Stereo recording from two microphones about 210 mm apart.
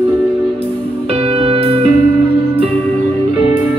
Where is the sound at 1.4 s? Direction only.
25° right (ahead or behind).